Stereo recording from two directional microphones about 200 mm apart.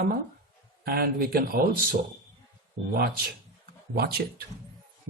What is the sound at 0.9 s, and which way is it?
Speech, 50° right (ahead or behind).